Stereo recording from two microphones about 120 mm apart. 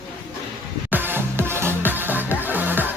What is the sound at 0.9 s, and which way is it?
Music, 15° right (ahead or behind).